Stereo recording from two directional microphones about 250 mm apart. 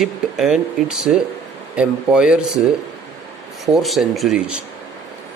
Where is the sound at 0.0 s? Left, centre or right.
Centre.